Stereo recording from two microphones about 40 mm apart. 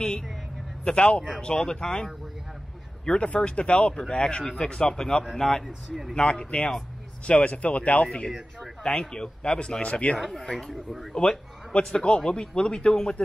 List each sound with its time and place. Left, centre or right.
0.8 s a man's voice: left
3.1 s a man's voice: left
5.2 s speech: centre
6.1 s a man's voice: left
7.2 s speech: left
8.5 s speech: centre
9.1 s a man's voice: left
10.1 s speech: centre
10.7 s speech: centre
11.1 s a man's voice: left